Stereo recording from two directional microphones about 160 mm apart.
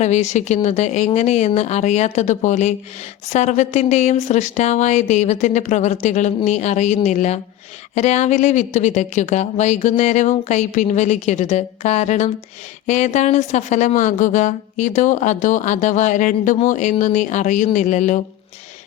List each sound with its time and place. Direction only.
0.0 s speech: 45° left (ahead or behind)